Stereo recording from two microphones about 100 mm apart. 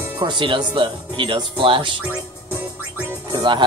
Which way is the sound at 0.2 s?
50° right (ahead or behind).